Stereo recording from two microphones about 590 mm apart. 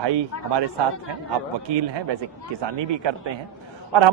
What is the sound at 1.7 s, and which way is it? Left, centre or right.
A woman's voice, right.